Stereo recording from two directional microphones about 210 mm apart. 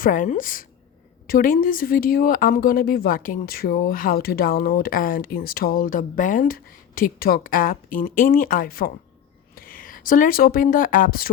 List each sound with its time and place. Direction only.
0.0 s a woman's voice: 40° left (ahead or behind)